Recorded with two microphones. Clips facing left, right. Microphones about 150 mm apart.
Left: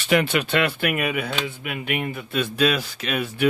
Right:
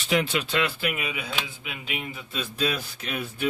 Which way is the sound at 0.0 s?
65° left (ahead or behind).